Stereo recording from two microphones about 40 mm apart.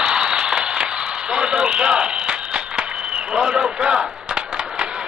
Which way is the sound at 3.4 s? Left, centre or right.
Centre.